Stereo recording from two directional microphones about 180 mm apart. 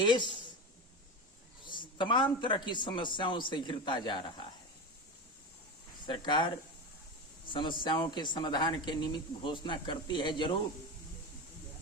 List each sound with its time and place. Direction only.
0.0 s speech: 25° left (ahead or behind)
1.6 s speech: 25° left (ahead or behind)
6.1 s speech: 25° left (ahead or behind)